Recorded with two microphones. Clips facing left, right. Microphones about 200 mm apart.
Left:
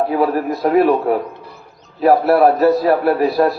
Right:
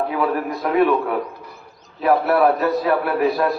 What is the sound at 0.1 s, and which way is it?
Speech, 35° left (ahead or behind).